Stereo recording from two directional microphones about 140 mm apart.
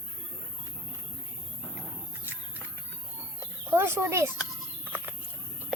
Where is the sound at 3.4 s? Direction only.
15° right (ahead or behind).